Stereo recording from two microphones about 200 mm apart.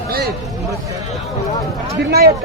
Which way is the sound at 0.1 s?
50° right (ahead or behind).